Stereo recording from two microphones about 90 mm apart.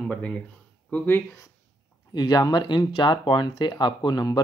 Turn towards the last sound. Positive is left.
turn(degrees=50)  # may be behind; listen again after turning